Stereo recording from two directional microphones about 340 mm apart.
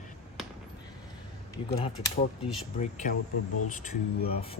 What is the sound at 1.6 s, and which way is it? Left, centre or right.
Speech, centre.